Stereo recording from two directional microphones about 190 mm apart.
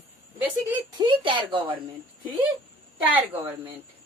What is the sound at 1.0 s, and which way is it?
Speech, 25° right (ahead or behind).